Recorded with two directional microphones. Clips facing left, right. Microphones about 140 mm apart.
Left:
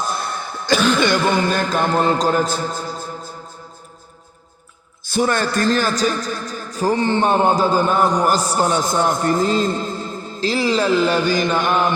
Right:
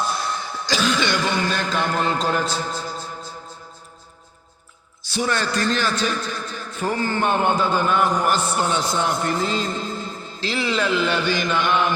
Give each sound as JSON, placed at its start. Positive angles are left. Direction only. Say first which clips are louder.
{"t": 0.0, "sound": "cough", "louder": "left 1 dB", "side_deg": 50}
{"t": 0.9, "sound": "a man's voice", "louder": "left 5 dB", "side_deg": 50}
{"t": 5.0, "sound": "a man's voice", "louder": "left 5 dB", "side_deg": 50}
{"t": 6.9, "sound": "a man's voice", "louder": "left 5 dB", "side_deg": 25}
{"t": 7.3, "sound": "a man's voice", "louder": "left 3 dB", "side_deg": 35}